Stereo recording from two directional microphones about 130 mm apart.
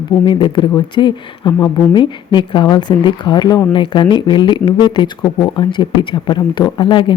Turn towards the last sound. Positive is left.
turn(degrees=40)  # may be behind; listen again after turning